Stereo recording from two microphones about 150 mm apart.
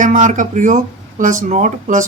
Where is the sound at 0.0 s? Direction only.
60° right (ahead or behind).